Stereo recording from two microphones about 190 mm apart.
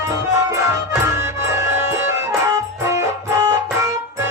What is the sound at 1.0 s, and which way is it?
Music, 15° right (ahead or behind).